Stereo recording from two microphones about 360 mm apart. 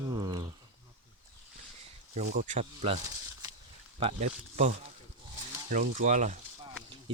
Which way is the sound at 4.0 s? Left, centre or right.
Centre.